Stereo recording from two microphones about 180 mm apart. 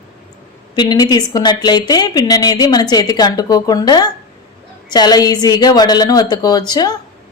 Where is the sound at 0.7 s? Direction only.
25° left (ahead or behind).